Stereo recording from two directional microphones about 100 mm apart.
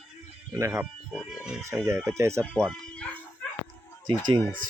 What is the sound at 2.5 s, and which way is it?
Bow-wow, 5° left (ahead or behind).